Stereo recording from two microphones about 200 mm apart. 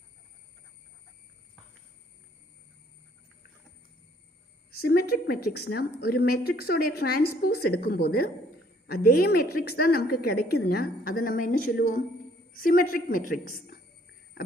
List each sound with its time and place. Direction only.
4.8 s a woman's voice: 50° left (ahead or behind)